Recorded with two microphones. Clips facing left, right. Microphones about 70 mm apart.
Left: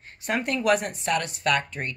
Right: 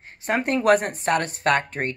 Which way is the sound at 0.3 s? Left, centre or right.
Right.